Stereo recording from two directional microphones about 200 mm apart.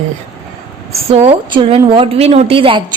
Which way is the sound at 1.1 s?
30° right (ahead or behind).